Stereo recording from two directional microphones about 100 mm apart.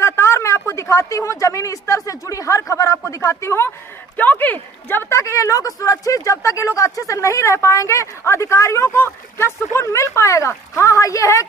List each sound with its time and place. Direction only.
0.0 s speech: 25° left (ahead or behind)